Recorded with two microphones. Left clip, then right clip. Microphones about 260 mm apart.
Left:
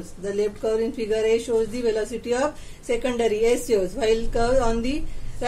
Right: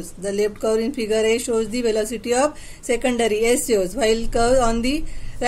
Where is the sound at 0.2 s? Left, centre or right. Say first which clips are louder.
Right 3 dB; right.